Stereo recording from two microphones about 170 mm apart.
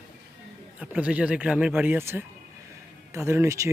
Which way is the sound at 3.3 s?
15° right (ahead or behind).